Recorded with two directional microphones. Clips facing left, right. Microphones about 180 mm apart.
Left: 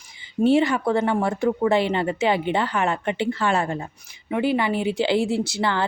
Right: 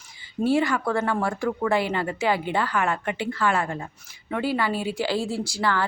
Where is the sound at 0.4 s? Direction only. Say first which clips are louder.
Left 4 dB; 25° left (ahead or behind).